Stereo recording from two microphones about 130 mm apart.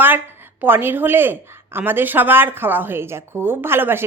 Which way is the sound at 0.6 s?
15° right (ahead or behind).